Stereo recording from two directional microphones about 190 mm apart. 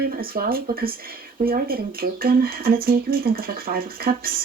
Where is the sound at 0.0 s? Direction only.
50° right (ahead or behind).